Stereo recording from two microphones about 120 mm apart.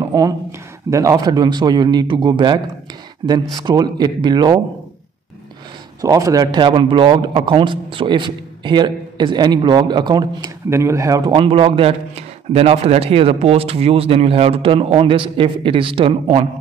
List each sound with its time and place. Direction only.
0.0 s a man's voice: 30° right (ahead or behind)
5.9 s a man's voice: 30° right (ahead or behind)
10.7 s speech: 25° right (ahead or behind)
11.3 s a man's voice: 50° right (ahead or behind)